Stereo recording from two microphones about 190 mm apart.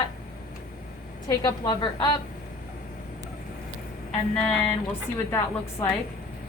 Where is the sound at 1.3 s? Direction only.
20° left (ahead or behind).